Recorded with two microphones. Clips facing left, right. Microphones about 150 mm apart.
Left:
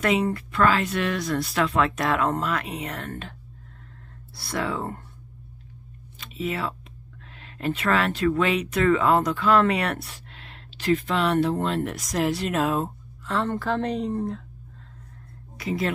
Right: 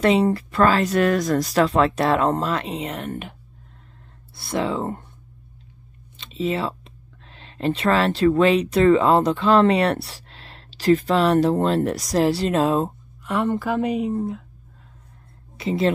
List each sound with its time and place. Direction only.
0.0 s speech: 30° right (ahead or behind)
4.4 s speech: 20° right (ahead or behind)
6.1 s a sound: 25° right (ahead or behind)
7.3 s speech: 30° right (ahead or behind)
13.2 s speech: 15° right (ahead or behind)
15.5 s speech: 25° right (ahead or behind)